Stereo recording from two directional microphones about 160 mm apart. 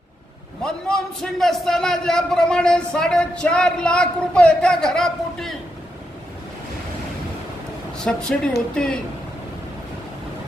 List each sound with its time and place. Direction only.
0.6 s a man's voice: 5° left (ahead or behind)
7.9 s a man's voice: 5° left (ahead or behind)